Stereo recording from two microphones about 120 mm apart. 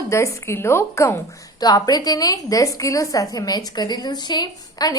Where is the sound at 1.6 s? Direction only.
35° left (ahead or behind).